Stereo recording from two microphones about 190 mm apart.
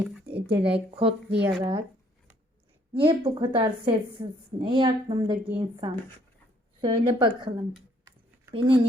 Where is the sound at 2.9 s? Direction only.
25° right (ahead or behind).